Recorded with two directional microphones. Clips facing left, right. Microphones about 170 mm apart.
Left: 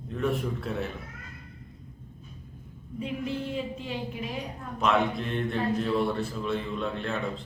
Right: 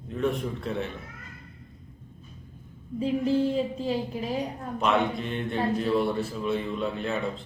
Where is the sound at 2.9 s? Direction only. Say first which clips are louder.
Right 8 dB; 35° right (ahead or behind).